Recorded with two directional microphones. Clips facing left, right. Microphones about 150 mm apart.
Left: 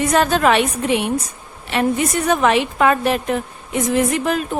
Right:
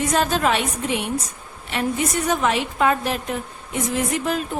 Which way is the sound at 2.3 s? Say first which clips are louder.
Left 8 dB; 70° left (ahead or behind).